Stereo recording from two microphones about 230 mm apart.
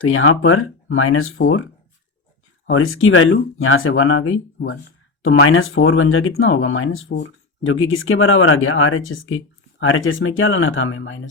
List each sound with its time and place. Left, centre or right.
0.0 s speech: left
2.6 s speech: left